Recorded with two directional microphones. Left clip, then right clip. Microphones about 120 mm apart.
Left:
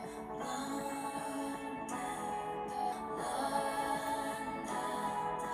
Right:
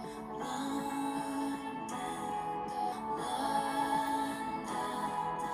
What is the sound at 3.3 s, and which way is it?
Music, 20° right (ahead or behind).